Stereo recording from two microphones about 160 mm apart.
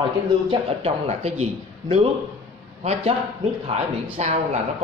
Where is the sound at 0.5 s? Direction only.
40° right (ahead or behind).